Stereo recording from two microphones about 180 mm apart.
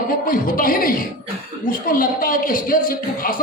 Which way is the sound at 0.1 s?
50° left (ahead or behind).